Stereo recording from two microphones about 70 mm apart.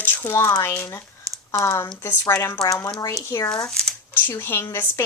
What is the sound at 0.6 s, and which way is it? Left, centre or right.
Speech, left.